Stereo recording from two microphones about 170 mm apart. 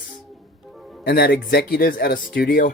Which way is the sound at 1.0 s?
70° left (ahead or behind).